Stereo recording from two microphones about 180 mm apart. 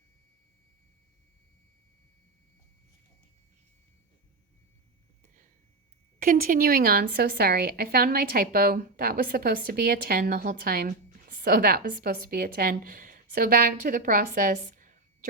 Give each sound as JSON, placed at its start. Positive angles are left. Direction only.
{"t": 6.1, "sound": "a woman's voice", "side_deg": -50}